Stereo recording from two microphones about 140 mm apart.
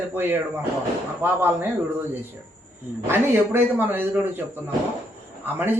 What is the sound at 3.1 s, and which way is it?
A man's voice, 15° right (ahead or behind).